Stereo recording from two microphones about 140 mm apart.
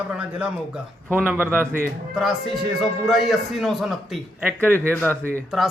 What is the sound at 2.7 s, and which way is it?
A man's voice, centre (ahead or behind).